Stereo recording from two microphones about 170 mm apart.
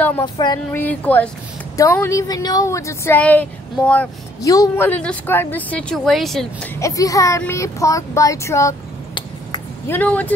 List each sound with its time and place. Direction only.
0.2 s a sound: 25° left (ahead or behind)
0.7 s a woman's voice: 10° left (ahead or behind)
4.4 s a woman's voice: 20° left (ahead or behind); by 6.7 s centre (ahead or behind)
6.7 s a woman's voice: 20° left (ahead or behind)
9.8 s a woman's voice: 10° left (ahead or behind)